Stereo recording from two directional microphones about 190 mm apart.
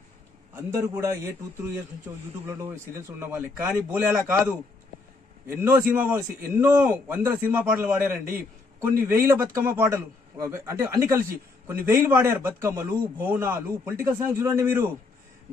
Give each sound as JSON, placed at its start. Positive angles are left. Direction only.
{"t": 0.6, "sound": "a man's voice", "side_deg": -15}
{"t": 5.6, "sound": "a man's voice", "side_deg": -10}